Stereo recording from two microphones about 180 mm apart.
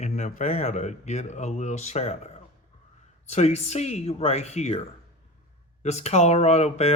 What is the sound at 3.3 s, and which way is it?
Speech, 40° left (ahead or behind).